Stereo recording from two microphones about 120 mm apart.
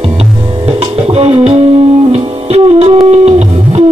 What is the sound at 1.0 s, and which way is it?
Music, 55° right (ahead or behind).